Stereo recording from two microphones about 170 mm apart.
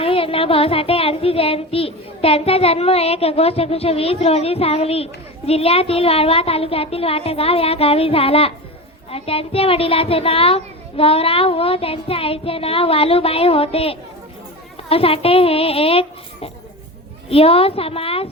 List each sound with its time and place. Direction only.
0.0 s child singing: 35° left (ahead or behind)